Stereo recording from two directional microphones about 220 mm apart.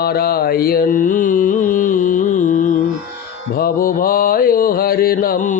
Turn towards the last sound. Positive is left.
turn(degrees=40)  # may be behind; listen again after turning